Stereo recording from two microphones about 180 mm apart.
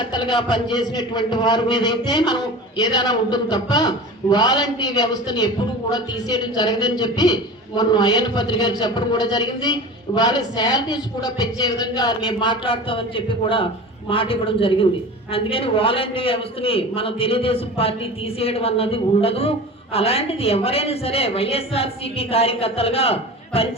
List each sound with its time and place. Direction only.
0.0 s a man's voice: 25° left (ahead or behind)